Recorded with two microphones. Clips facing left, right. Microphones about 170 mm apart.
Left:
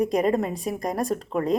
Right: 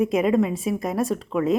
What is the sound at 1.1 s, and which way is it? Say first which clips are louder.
Speech: right 2 dB; 40° left (ahead or behind).